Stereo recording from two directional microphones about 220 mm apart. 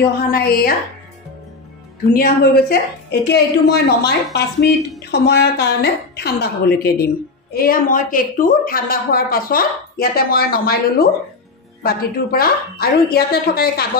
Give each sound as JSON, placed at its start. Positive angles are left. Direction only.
{"t": 0.3, "sound": "a woman's voice", "side_deg": 45}
{"t": 2.1, "sound": "a woman's voice", "side_deg": 45}